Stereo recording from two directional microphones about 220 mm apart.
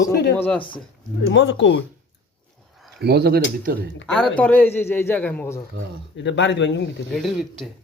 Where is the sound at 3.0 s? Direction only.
45° right (ahead or behind).